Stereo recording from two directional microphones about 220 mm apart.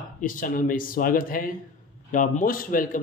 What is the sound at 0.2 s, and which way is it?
Speech, 35° left (ahead or behind).